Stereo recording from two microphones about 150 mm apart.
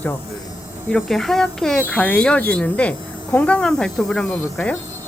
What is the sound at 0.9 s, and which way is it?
Speech, centre (ahead or behind).